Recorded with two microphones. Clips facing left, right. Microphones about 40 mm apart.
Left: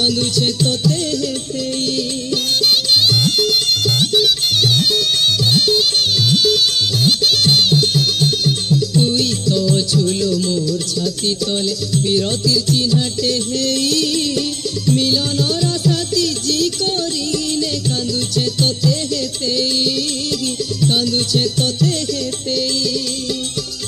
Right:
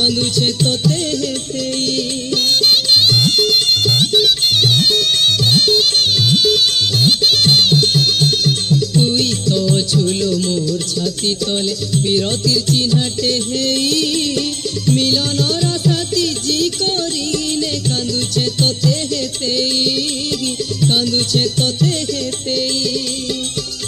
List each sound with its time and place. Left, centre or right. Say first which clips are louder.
0.0 s music: right 1 dB; right
2.3 s music: right 2 dB; right
12.1 s music: even; right
14.9 s music: right 1 dB; right
15.8 s music: even; right
18.3 s music: right 1 dB; right